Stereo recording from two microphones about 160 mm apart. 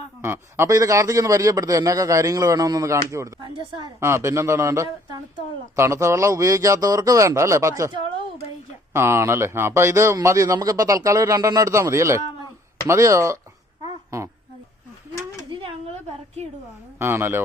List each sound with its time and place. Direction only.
0.2 s a man's voice: 15° right (ahead or behind)
3.4 s a woman's voice: 30° right (ahead or behind)
4.0 s a man's voice: 15° right (ahead or behind)
17.0 s a man's voice: 15° right (ahead or behind)